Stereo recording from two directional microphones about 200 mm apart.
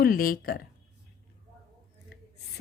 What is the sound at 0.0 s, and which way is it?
Speech, 45° left (ahead or behind).